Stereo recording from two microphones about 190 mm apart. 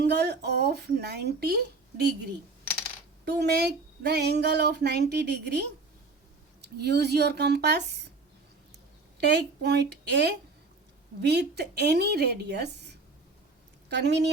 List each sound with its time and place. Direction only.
0.0 s speech: 60° right (ahead or behind)
3.2 s speech: 60° right (ahead or behind)
9.1 s speech: 60° right (ahead or behind)